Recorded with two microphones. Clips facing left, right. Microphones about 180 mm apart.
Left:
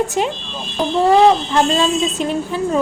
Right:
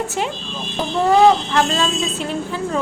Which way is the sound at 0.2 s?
20° left (ahead or behind).